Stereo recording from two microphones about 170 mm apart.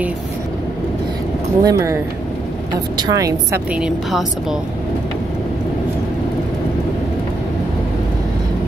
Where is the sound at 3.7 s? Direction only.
5° right (ahead or behind).